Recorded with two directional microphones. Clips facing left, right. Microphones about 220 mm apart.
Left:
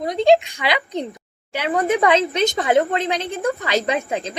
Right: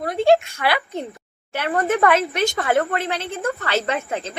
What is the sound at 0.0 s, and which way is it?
A woman's voice, 15° left (ahead or behind).